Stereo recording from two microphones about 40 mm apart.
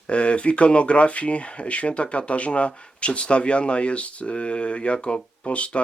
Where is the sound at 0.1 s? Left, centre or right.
Left.